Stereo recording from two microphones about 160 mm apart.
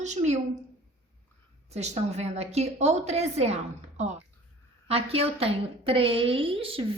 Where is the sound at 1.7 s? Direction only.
45° right (ahead or behind).